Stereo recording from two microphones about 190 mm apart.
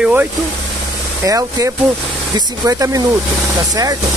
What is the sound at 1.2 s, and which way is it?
Speech, 20° right (ahead or behind).